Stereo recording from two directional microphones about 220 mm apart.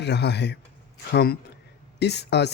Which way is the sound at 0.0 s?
50° left (ahead or behind).